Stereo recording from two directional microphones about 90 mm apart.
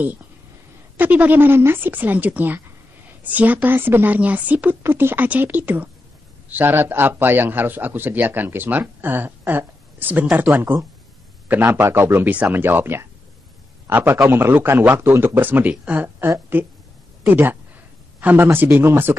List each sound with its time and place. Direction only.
0.9 s a man's voice: 20° right (ahead or behind)